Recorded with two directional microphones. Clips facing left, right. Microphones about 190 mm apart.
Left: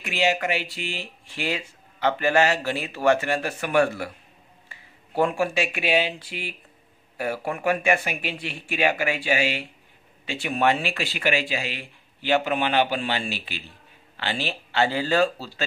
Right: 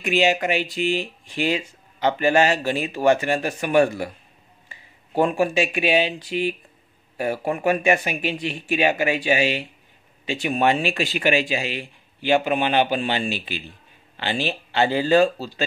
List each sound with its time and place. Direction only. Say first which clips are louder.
0.0 s speech: right 4 dB; 20° right (ahead or behind)